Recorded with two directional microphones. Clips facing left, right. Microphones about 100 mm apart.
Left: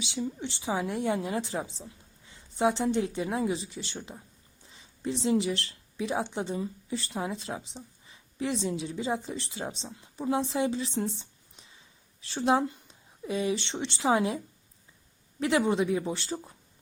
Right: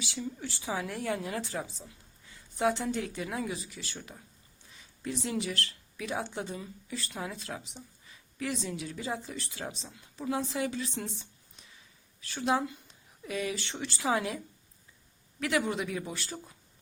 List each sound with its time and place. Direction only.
0.0 s speech: 20° left (ahead or behind)